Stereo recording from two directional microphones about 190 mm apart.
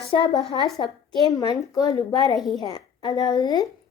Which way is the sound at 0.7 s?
20° left (ahead or behind).